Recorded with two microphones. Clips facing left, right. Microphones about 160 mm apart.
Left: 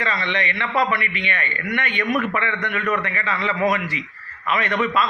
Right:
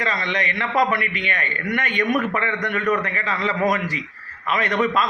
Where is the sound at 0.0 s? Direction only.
40° right (ahead or behind).